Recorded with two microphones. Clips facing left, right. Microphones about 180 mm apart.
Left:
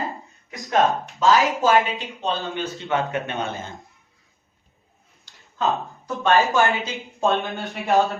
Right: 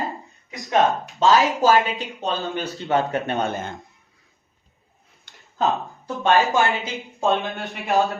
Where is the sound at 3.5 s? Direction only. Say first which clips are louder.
Right 3 dB; 60° right (ahead or behind).